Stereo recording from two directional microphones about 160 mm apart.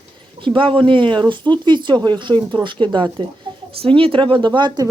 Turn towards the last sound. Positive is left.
turn(degrees=-30)  # may be behind; listen again after turning